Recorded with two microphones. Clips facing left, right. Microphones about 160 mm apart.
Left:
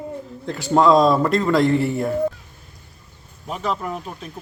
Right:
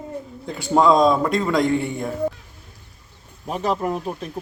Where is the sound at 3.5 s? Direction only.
40° right (ahead or behind).